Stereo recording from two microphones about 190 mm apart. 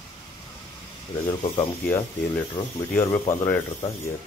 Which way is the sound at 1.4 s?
35° left (ahead or behind).